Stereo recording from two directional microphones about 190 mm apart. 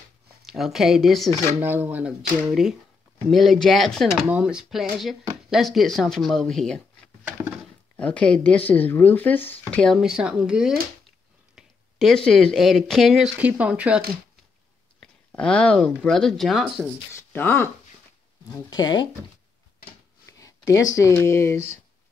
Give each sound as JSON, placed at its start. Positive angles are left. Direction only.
{"t": 0.5, "sound": "speech", "side_deg": 0}
{"t": 1.6, "sound": "speech", "side_deg": -10}
{"t": 3.3, "sound": "speech", "side_deg": 0}
{"t": 7.9, "sound": "speech", "side_deg": 5}
{"t": 17.1, "sound": "speech", "side_deg": 10}
{"t": 20.2, "sound": "speech", "side_deg": 15}